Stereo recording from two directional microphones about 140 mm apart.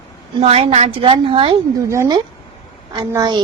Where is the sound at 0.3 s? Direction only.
45° right (ahead or behind).